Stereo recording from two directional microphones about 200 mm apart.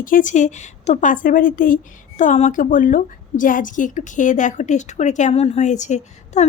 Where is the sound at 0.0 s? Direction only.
40° left (ahead or behind).